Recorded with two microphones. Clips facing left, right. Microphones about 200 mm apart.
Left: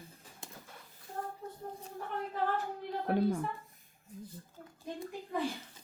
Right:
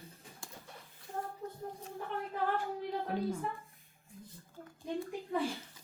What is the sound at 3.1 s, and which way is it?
Speech, 65° left (ahead or behind).